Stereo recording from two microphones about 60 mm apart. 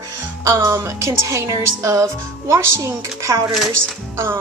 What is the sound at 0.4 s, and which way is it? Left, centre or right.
Speech, right.